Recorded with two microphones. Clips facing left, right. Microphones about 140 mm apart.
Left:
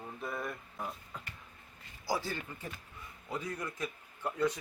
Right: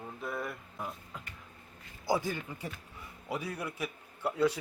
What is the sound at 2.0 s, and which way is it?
A man's voice, 20° right (ahead or behind).